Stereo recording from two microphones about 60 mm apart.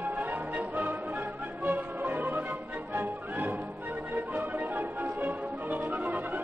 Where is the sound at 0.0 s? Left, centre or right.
Right.